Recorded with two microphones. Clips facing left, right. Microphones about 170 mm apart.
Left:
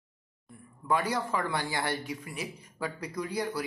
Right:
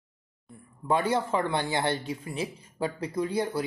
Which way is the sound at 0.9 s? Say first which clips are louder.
Right 4 dB; 25° right (ahead or behind).